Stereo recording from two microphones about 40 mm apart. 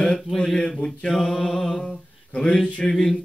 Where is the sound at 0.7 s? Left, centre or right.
Left.